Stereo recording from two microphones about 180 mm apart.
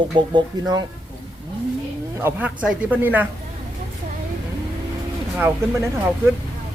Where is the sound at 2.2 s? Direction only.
10° right (ahead or behind).